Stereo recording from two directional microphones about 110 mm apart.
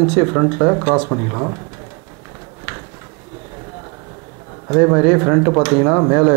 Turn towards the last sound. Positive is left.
turn(degrees=-20)  # may be behind; listen again after turning